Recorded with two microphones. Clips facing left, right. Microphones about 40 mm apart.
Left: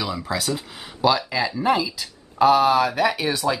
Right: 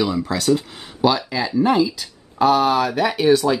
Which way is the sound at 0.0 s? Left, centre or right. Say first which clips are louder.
Right 5 dB; centre.